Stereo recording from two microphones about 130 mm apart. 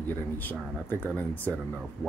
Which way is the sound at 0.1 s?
15° left (ahead or behind).